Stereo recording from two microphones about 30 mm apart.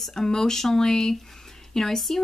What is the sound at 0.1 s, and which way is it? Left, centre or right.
Speech, centre.